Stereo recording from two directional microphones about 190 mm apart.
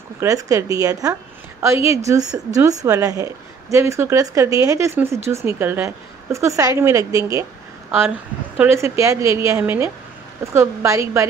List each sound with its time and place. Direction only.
0.2 s speech: 20° right (ahead or behind)
8.5 s speech: 15° right (ahead or behind)